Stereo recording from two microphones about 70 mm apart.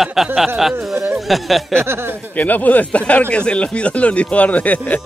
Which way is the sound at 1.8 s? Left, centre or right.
Right.